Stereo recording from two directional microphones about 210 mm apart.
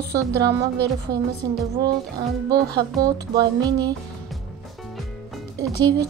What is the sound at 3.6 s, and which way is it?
Music, 20° right (ahead or behind).